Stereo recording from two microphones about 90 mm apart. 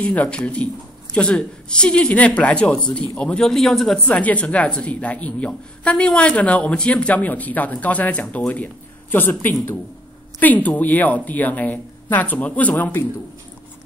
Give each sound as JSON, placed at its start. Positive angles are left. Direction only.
{"t": 0.0, "sound": "a woman's voice", "side_deg": 15}
{"t": 4.2, "sound": "a woman's voice", "side_deg": 15}